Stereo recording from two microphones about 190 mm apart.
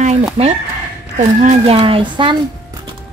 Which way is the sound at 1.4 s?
35° right (ahead or behind).